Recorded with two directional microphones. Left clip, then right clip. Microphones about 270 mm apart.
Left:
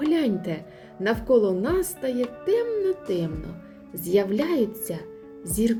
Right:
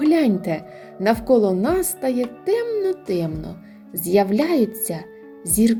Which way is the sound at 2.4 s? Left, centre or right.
Right.